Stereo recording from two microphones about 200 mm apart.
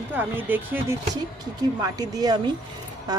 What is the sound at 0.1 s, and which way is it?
Speech, 10° right (ahead or behind).